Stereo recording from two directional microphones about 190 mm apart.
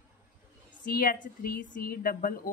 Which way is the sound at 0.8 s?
50° left (ahead or behind).